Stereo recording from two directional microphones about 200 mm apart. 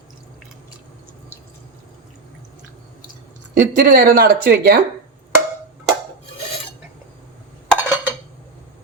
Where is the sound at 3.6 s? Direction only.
45° right (ahead or behind).